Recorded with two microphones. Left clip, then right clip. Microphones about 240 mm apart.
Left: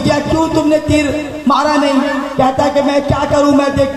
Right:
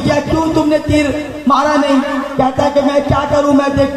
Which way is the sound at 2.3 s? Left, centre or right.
Left.